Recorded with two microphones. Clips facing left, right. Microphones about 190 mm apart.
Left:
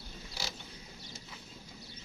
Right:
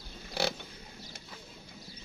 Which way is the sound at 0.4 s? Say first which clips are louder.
Right 12 dB; 60° right (ahead or behind).